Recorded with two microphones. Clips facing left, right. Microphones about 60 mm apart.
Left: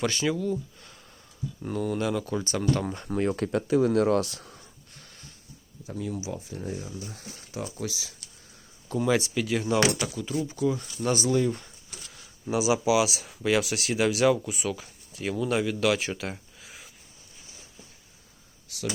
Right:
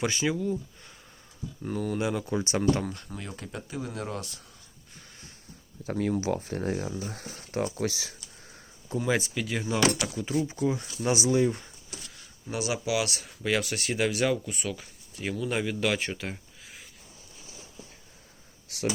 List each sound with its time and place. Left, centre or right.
0.0 s speech: centre
1.6 s speech: centre
2.0 s speech: centre
3.1 s speech: left
5.8 s speech: right
7.0 s speech: right
9.0 s speech: centre
10.3 s speech: right
12.0 s speech: centre
18.7 s a sound: right